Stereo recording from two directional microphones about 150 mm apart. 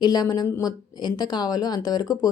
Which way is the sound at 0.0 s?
25° left (ahead or behind).